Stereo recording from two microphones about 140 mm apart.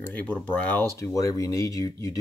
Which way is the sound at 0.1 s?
10° left (ahead or behind).